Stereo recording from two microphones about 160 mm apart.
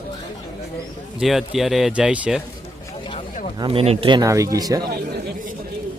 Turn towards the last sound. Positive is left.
turn(degrees=-25)  # may be behind; listen again after turning